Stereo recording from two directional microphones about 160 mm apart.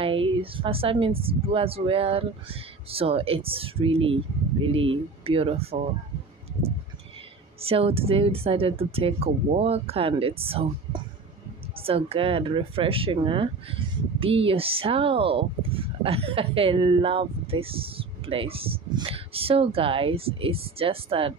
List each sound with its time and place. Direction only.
0.0 s speech: 35° right (ahead or behind)
7.6 s speech: 35° right (ahead or behind)